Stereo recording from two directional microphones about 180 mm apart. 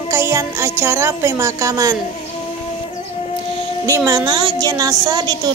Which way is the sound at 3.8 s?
15° right (ahead or behind).